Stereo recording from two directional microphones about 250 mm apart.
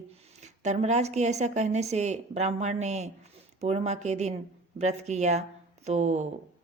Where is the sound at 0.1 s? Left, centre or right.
Right.